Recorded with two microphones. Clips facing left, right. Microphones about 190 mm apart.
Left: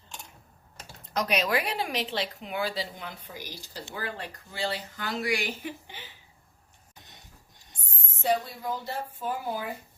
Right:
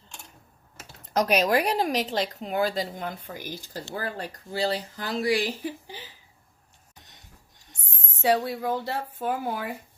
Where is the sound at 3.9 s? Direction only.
40° right (ahead or behind).